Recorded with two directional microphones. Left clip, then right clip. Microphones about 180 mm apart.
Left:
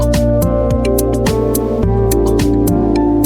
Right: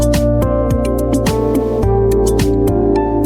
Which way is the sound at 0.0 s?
Centre (ahead or behind).